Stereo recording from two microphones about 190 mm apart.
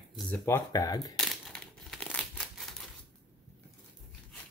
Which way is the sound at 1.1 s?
5° left (ahead or behind).